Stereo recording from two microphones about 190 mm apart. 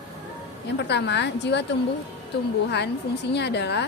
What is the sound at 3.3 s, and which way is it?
Speech, 65° left (ahead or behind).